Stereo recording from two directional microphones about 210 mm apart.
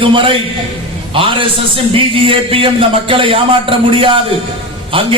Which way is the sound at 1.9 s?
25° right (ahead or behind).